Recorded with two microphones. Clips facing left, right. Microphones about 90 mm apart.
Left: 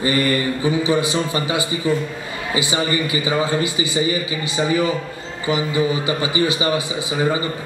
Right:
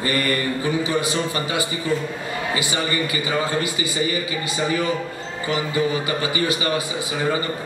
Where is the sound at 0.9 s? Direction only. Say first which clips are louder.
Left 3 dB; 20° left (ahead or behind).